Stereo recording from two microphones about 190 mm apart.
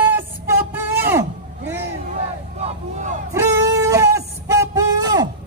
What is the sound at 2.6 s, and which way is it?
Vehicle, 40° right (ahead or behind).